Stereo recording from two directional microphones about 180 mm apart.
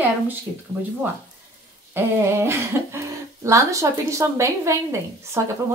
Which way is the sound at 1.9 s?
15° right (ahead or behind).